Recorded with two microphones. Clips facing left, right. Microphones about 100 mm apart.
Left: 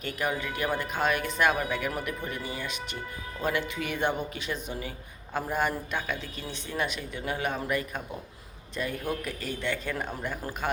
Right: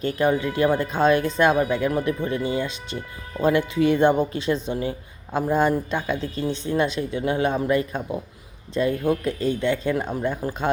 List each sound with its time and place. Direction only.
0.0 s speech: 25° right (ahead or behind)